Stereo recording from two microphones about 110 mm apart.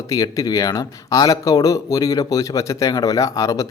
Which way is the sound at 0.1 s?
35° left (ahead or behind).